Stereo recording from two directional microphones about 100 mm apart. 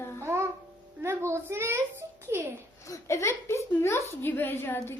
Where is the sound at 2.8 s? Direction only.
30° left (ahead or behind).